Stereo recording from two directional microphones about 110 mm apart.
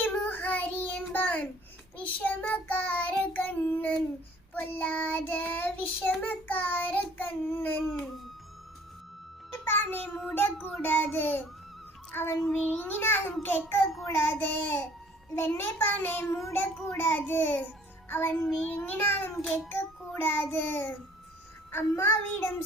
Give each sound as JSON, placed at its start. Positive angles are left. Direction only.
{"t": 0.0, "sound": "child singing", "side_deg": 15}
{"t": 7.9, "sound": "speech", "side_deg": -5}
{"t": 9.5, "sound": "music", "side_deg": 20}
{"t": 10.8, "sound": "child singing", "side_deg": 15}
{"t": 12.1, "sound": "a child's voice", "side_deg": 20}
{"t": 12.4, "sound": "child singing", "side_deg": 10}